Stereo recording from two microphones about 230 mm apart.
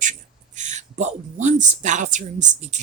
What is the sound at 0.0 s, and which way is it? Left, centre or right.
Speech, right.